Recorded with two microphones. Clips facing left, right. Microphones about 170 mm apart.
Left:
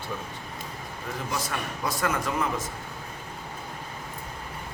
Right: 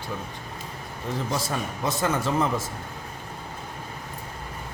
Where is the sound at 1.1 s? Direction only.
30° right (ahead or behind).